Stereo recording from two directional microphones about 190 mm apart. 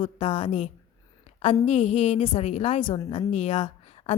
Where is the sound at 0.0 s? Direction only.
30° left (ahead or behind).